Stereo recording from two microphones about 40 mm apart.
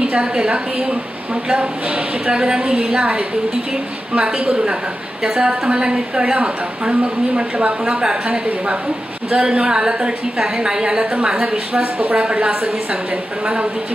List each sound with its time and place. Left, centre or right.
0.0 s a woman's voice: right
9.3 s a woman's voice: right
9.7 s a woman's voice: centre
11.8 s speech: right
12.2 s a woman's voice: right